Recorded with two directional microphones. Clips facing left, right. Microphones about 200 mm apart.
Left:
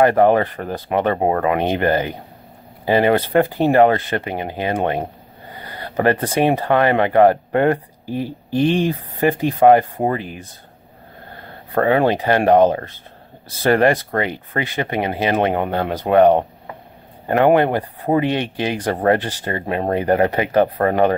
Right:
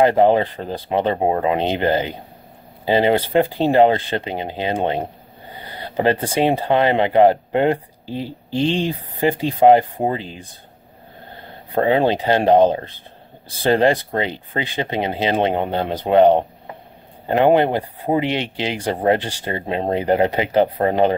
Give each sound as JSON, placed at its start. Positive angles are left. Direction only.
{"t": 0.0, "sound": "speech", "side_deg": -20}
{"t": 11.7, "sound": "speech", "side_deg": -25}